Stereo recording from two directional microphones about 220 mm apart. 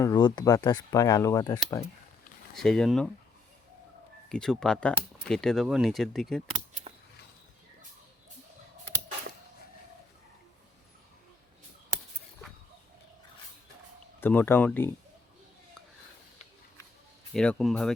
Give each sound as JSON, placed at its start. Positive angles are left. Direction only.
{"t": 0.0, "sound": "speech", "side_deg": 20}
{"t": 2.6, "sound": "speech", "side_deg": 0}
{"t": 4.3, "sound": "speech", "side_deg": 5}
{"t": 14.2, "sound": "speech", "side_deg": 10}
{"t": 17.3, "sound": "speech", "side_deg": 5}